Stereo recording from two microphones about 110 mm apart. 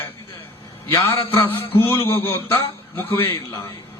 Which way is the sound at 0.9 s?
20° left (ahead or behind).